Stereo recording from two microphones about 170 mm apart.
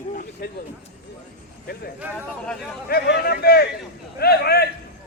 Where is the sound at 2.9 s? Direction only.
65° left (ahead or behind).